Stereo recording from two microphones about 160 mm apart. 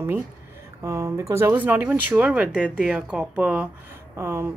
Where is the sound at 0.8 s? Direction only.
15° right (ahead or behind).